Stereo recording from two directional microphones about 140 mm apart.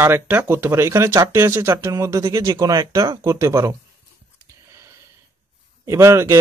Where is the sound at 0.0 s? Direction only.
15° right (ahead or behind).